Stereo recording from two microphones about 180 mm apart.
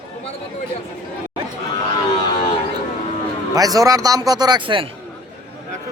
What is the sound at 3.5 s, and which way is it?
Speech, 20° right (ahead or behind).